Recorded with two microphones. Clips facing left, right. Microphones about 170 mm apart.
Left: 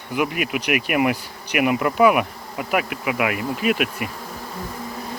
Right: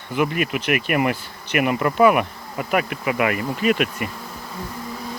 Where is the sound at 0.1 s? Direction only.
10° left (ahead or behind).